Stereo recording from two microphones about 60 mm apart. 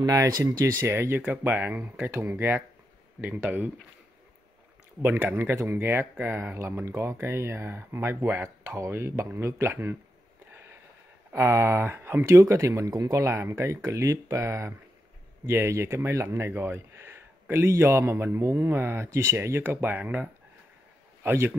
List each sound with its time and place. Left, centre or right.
0.0 s speech: right
0.8 s speech: right
1.2 s speech: right
3.4 s speech: right
5.0 s speech: right
10.5 s a sound: right
11.3 s speech: right
12.4 s speech: right
13.7 s speech: right
15.4 s a man's voice: right
18.4 s speech: right
19.0 s speech: right
19.6 s speech: right
21.2 s a man's voice: right